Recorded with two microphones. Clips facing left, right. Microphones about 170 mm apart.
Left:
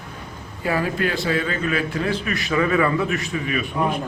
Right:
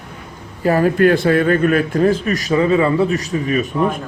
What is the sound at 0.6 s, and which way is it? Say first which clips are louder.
A man's voice: right 9 dB; 45° right (ahead or behind).